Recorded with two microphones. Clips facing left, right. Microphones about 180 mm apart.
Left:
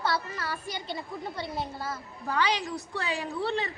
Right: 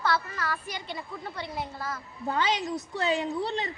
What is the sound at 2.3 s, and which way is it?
A woman's voice, 20° right (ahead or behind).